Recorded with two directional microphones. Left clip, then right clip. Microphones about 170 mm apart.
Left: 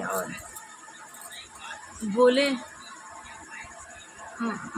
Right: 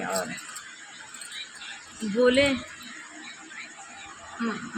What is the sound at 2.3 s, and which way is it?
Speech, 20° left (ahead or behind).